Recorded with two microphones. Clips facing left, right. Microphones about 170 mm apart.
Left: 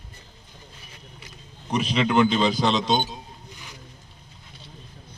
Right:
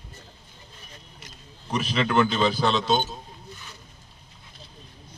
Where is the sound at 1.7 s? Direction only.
15° left (ahead or behind).